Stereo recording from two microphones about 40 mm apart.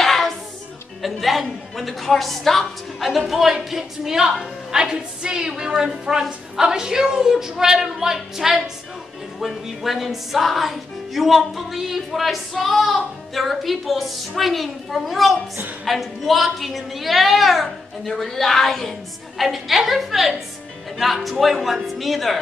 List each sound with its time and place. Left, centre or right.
0.0 s music: centre
1.0 s a woman's voice: centre
19.4 s speech: centre